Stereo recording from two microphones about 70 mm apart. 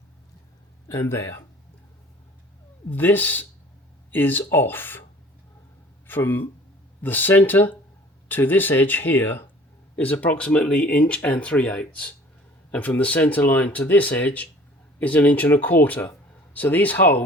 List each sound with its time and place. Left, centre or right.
0.9 s speech: left
2.9 s speech: left
6.1 s speech: left